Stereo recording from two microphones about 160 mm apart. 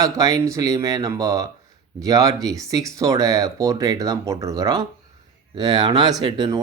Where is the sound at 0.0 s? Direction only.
20° right (ahead or behind).